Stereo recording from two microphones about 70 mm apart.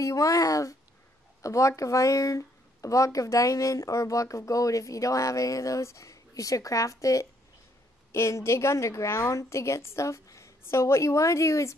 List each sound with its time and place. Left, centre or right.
0.0 s speech: left